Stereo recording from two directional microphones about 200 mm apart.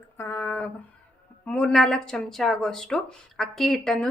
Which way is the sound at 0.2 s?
10° left (ahead or behind).